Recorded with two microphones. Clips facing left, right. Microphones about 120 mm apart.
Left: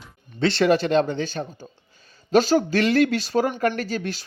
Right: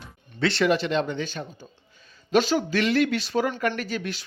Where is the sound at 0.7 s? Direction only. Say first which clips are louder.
Left 4 dB; 40° left (ahead or behind).